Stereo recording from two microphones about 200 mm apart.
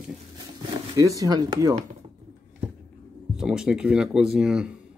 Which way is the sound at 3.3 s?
5° right (ahead or behind).